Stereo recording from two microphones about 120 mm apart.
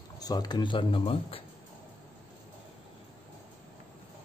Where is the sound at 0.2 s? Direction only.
35° left (ahead or behind); by 1.4 s 50° left (ahead or behind).